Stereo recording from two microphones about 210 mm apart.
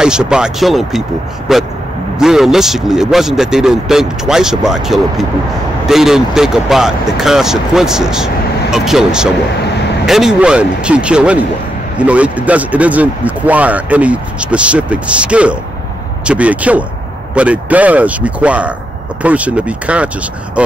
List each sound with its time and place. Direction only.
0.0 s speech: 5° right (ahead or behind)